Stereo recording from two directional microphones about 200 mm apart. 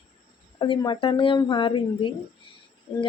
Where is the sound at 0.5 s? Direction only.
25° left (ahead or behind).